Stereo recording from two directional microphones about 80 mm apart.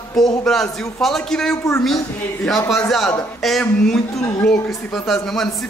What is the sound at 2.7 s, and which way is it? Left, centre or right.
A man's voice, centre.